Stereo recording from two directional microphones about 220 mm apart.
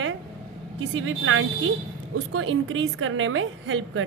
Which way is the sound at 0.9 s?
65° right (ahead or behind).